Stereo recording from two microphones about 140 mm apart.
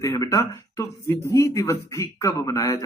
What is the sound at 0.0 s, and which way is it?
Speech, 25° left (ahead or behind).